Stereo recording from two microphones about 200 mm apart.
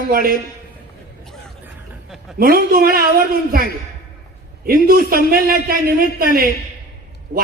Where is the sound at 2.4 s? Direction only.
45° right (ahead or behind).